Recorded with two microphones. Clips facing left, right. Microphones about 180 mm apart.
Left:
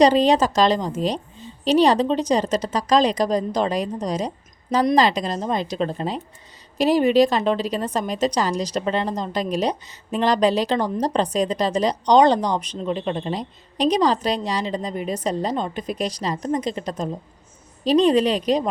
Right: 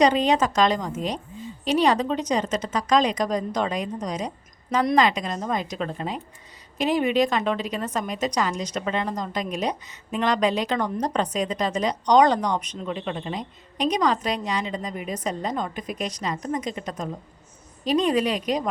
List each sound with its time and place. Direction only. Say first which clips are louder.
0.0 s a woman's voice: left 4 dB; 35° left (ahead or behind)